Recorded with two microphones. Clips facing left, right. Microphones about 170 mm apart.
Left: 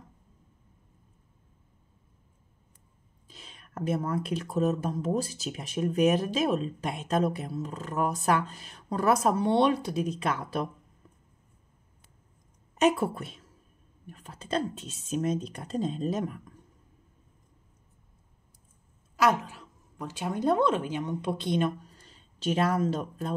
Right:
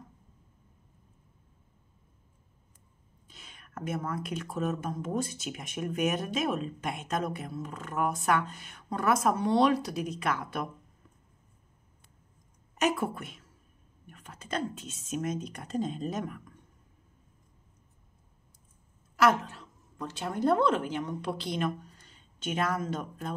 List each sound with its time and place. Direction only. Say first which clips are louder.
3.3 s speech: left 3 dB; 30° left (ahead or behind)
12.7 s speech: left 4 dB; 30° left (ahead or behind)
19.1 s a woman's voice: even; 15° left (ahead or behind); by 23.3 s 35° left (ahead or behind)